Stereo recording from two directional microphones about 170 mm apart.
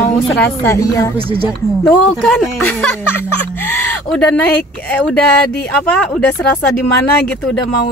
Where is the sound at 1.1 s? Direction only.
30° right (ahead or behind).